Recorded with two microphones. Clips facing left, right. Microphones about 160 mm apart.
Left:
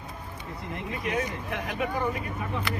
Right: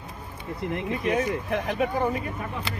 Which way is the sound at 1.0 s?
30° right (ahead or behind).